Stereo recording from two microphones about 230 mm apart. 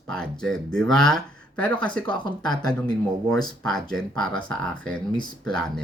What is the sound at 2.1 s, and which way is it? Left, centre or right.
Speech, centre.